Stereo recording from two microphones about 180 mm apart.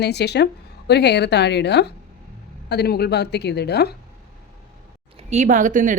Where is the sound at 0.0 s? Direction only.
70° left (ahead or behind).